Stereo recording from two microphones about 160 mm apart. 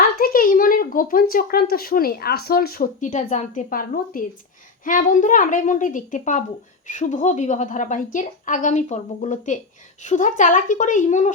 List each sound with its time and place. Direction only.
0.2 s a woman's voice: 65° left (ahead or behind)